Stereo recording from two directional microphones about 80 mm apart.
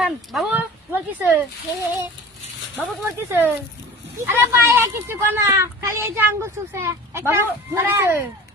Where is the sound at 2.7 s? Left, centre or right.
Right.